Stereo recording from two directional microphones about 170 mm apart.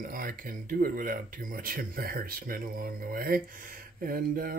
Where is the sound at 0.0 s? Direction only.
55° right (ahead or behind).